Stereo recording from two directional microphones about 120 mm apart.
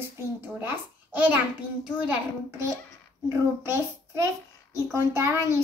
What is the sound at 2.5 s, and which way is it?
A child's voice, 25° right (ahead or behind).